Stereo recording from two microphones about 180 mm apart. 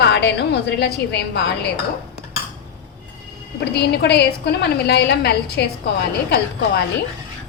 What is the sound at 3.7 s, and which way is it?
A woman's voice, 65° left (ahead or behind).